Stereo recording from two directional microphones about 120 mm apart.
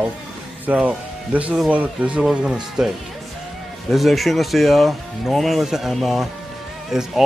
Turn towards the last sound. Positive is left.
turn(degrees=-5)  # may be behind; listen again after turning